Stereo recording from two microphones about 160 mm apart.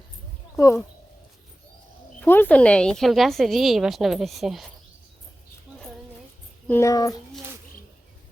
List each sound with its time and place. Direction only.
0.6 s speech: 20° left (ahead or behind)
2.2 s a woman's voice: 10° left (ahead or behind)
6.7 s speech: 15° left (ahead or behind)